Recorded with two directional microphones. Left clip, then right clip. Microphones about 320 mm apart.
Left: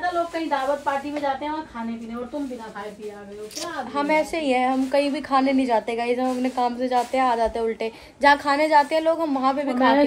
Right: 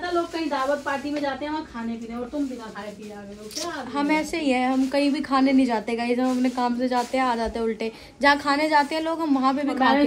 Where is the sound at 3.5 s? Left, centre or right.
Centre.